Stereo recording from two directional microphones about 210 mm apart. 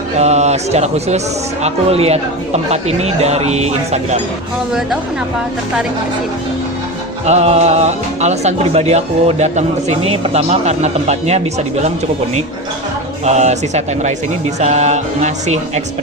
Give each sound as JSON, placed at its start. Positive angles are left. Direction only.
{"t": 0.2, "sound": "speech", "side_deg": -30}
{"t": 7.3, "sound": "speech", "side_deg": -30}
{"t": 13.2, "sound": "speech", "side_deg": -35}